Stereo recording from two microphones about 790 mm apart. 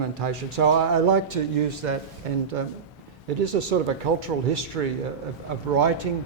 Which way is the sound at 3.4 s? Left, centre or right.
Right.